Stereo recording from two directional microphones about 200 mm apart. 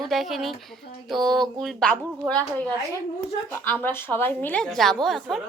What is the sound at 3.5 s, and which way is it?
A woman's voice, 10° left (ahead or behind).